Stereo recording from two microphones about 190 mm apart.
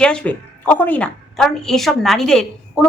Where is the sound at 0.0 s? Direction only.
5° left (ahead or behind).